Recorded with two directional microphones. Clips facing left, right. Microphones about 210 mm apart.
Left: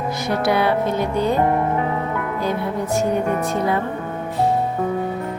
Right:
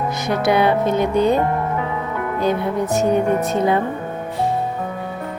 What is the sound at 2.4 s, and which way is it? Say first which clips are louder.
Speech: right 5 dB; 20° right (ahead or behind).